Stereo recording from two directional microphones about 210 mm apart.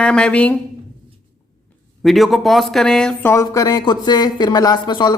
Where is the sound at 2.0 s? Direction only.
Centre (ahead or behind).